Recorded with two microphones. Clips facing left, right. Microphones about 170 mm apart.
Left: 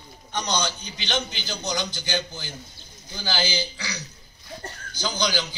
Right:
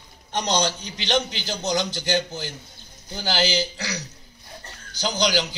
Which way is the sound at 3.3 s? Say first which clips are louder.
Right 4 dB; 80° right.